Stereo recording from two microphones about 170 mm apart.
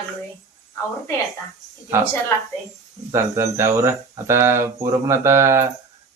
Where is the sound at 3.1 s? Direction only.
15° right (ahead or behind).